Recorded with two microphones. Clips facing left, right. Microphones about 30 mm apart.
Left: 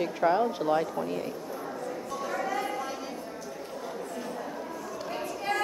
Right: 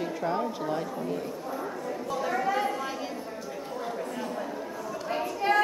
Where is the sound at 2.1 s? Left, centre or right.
Centre.